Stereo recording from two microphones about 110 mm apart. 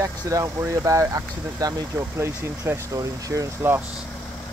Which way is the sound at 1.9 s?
25° right (ahead or behind).